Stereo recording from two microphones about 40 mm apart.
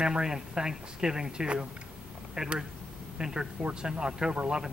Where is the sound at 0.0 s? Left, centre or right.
Centre.